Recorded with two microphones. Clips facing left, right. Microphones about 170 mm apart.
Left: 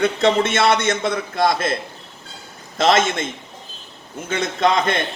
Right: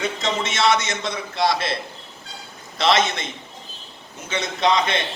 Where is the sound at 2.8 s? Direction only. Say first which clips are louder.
Left 3 dB; 45° left (ahead or behind).